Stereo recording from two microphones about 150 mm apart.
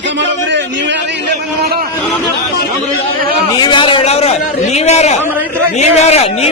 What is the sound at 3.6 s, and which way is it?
A man's voice, 30° left (ahead or behind).